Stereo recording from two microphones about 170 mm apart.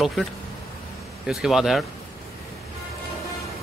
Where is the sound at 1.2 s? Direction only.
5° right (ahead or behind).